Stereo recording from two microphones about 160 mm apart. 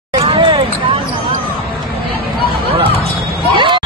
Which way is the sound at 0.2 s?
35° right (ahead or behind).